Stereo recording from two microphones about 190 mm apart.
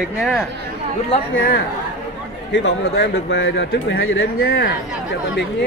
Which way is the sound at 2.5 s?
65° left (ahead or behind).